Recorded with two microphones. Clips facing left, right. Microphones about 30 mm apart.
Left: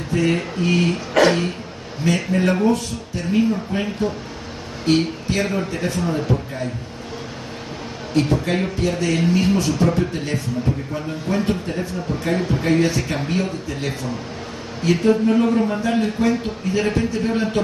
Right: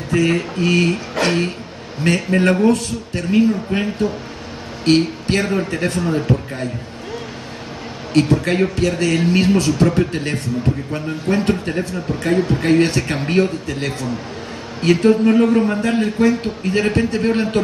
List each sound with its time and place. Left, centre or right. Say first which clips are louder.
0.1 s speech: right 3 dB; right
1.2 s speech: left 5 dB; left
2.0 s speech: right 3 dB; right
8.1 s speech: right 4 dB; right